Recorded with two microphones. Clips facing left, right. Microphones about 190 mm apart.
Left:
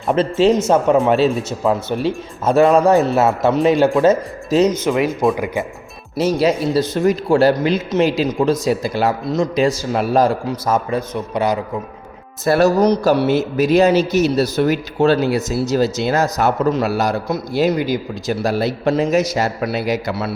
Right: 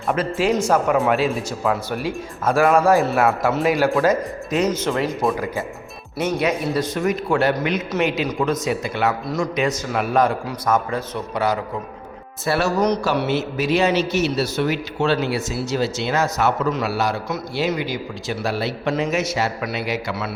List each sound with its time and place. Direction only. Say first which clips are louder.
0.2 s speech: left 7 dB; 25° left (ahead or behind)
4.9 s a man's voice: left 4 dB; 15° left (ahead or behind)
6.1 s speech: left 5 dB; 30° left (ahead or behind)
8.3 s speech: left 5 dB; 25° left (ahead or behind)
8.6 s a man's voice: left 4 dB; 35° left (ahead or behind); by 11.6 s 15° left (ahead or behind)
12.5 s speech: left 6 dB; 40° left (ahead or behind)